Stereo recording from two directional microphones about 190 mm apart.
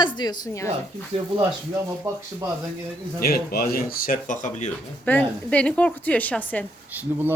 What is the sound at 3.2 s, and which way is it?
Speech, 50° left (ahead or behind).